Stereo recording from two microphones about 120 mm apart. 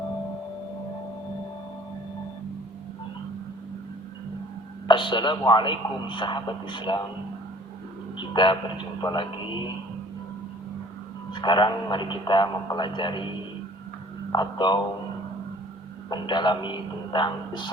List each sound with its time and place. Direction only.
4.9 s a man's voice: 40° left (ahead or behind)
8.2 s a man's voice: 40° left (ahead or behind)
11.3 s a man's voice: 40° left (ahead or behind)
14.3 s a man's voice: 40° left (ahead or behind)
16.0 s a man's voice: 40° left (ahead or behind)